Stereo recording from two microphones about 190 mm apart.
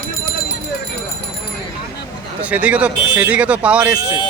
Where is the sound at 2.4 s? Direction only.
5° right (ahead or behind).